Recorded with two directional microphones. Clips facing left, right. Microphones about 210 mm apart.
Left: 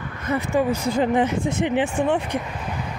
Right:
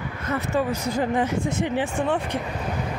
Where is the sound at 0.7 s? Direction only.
25° left (ahead or behind).